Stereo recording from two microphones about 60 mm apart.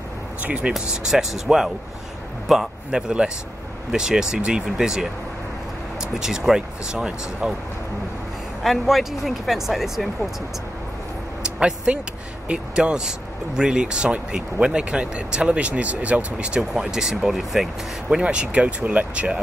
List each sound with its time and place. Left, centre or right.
0.4 s speech: right
0.7 s a man's voice: centre
2.9 s speech: centre
6.1 s speech: centre
8.6 s speech: centre
11.4 s vehicle: centre
12.4 s speech: centre
18.1 s speech: centre